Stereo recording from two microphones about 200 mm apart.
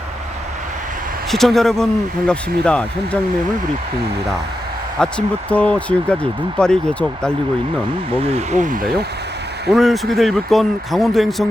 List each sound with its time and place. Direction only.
1.3 s speech: centre (ahead or behind)
4.9 s speech: 5° left (ahead or behind)
8.2 s speech: 30° right (ahead or behind)
9.6 s speech: centre (ahead or behind)